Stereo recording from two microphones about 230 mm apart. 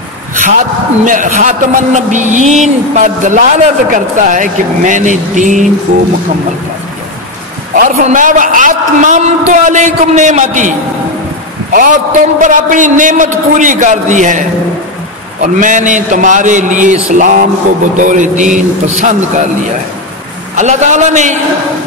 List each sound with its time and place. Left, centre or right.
0.3 s a sound: right
1.0 s a man's voice: right
7.7 s a man's voice: right
11.7 s a man's voice: right
15.4 s a man's voice: right
20.5 s a man's voice: right